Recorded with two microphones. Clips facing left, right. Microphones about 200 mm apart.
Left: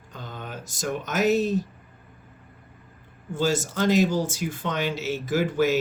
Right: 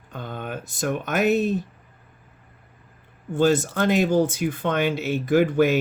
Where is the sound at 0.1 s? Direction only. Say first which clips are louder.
Right 5 dB; 55° right (ahead or behind).